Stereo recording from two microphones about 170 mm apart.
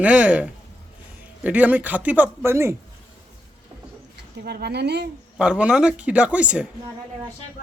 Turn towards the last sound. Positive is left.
turn(degrees=-5)  # may be behind; listen again after turning